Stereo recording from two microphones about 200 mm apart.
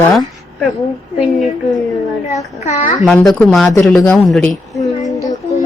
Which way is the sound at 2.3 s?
35° left (ahead or behind).